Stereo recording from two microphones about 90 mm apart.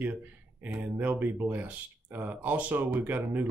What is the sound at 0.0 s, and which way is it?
Speech, 20° right (ahead or behind).